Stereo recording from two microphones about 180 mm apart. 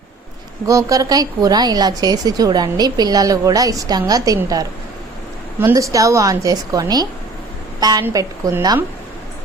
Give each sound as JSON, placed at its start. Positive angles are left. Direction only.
{"t": 0.7, "sound": "a woman's voice", "side_deg": -20}